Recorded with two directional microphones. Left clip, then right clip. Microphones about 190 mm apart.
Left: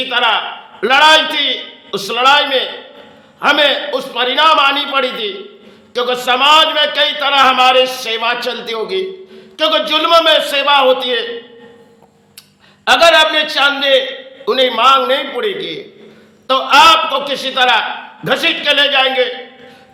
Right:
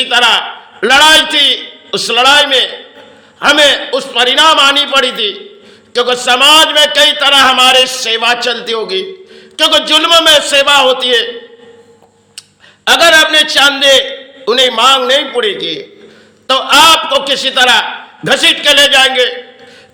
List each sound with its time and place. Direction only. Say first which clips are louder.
0.1 s a man's voice: right 4 dB; 20° right (ahead or behind)
12.8 s a man's voice: right 2 dB; 20° right (ahead or behind)